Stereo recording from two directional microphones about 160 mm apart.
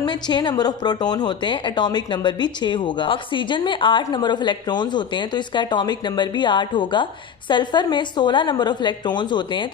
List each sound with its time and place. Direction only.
0.0 s a woman's voice: 25° left (ahead or behind)